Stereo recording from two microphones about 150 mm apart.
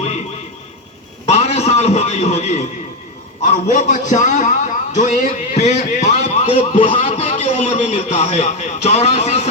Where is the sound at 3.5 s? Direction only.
50° left (ahead or behind).